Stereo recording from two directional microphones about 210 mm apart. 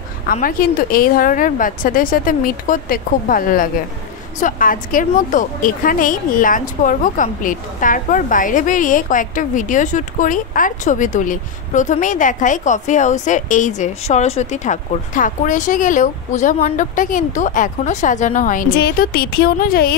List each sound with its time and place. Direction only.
0.3 s a woman's voice: 40° left (ahead or behind)